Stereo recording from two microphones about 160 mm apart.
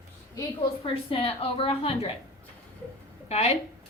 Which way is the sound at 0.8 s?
35° left (ahead or behind).